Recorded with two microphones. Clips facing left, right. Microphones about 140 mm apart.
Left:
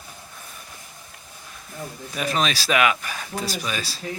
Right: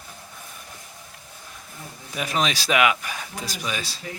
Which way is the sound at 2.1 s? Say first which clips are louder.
Left 1 dB; 15° right (ahead or behind).